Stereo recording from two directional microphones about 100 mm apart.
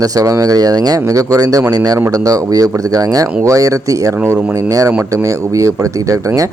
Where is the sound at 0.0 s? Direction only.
35° right (ahead or behind).